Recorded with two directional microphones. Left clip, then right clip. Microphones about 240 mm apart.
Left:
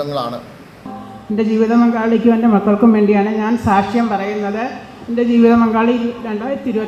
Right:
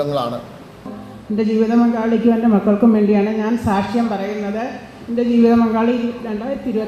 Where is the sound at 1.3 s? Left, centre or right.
Left.